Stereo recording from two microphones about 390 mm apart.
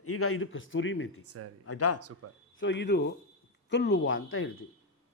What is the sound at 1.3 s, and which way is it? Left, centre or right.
Speech, right.